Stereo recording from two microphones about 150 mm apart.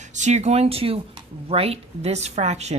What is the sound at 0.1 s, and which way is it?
A woman's voice, 50° right (ahead or behind).